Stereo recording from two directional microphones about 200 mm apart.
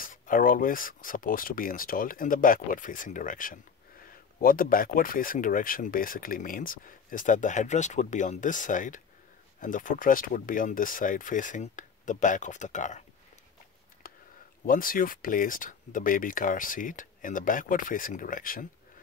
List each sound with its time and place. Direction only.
0.0 s speech: 45° left (ahead or behind)
14.0 s a sound: 45° left (ahead or behind)
14.7 s speech: 45° left (ahead or behind)